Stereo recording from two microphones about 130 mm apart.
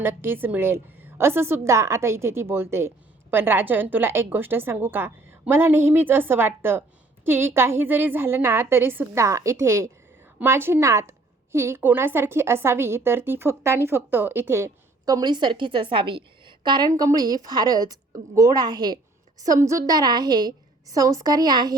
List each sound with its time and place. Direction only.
0.0 s a woman's voice: 15° right (ahead or behind); by 21.8 s 30° right (ahead or behind)